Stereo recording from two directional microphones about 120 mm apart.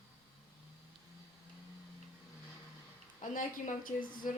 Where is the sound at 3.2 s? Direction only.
90° left.